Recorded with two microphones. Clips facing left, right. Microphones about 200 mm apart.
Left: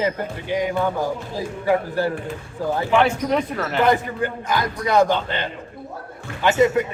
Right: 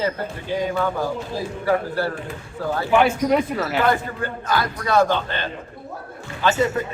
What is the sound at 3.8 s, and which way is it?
A man's voice, 15° left (ahead or behind).